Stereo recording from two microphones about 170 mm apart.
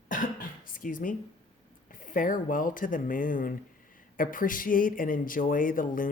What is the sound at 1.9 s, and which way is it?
Speech, 50° left (ahead or behind).